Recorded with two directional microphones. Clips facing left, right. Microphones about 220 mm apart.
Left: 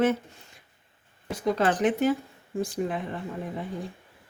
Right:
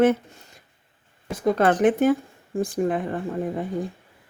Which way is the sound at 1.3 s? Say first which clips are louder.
Right 5 dB; 50° right (ahead or behind).